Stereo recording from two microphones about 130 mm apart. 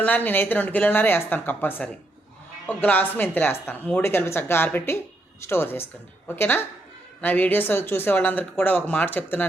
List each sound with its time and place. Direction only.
0.0 s speech: 15° left (ahead or behind)